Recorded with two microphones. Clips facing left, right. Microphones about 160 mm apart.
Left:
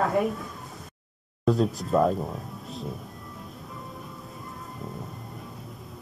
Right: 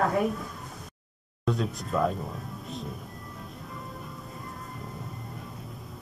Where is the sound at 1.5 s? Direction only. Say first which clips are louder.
Left 6 dB; centre (ahead or behind).